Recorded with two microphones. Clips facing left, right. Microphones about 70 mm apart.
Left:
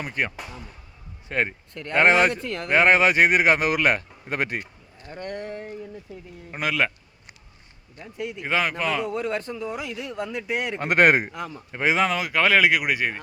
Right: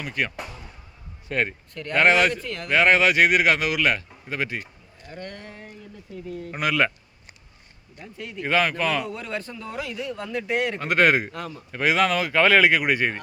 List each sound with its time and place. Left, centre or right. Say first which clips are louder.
0.0 s speech: even; left
1.3 s speech: even; left
5.1 s speech: left 5 dB; centre
6.6 s speech: right 2 dB; centre
8.0 s speech: even; centre
9.6 s speech: left 1 dB; centre
10.8 s speech: left 3 dB; left
11.3 s speech: even; centre